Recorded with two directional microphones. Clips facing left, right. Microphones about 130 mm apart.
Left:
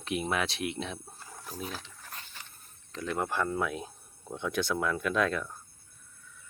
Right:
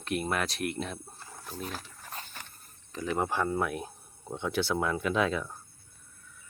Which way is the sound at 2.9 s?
10° right (ahead or behind).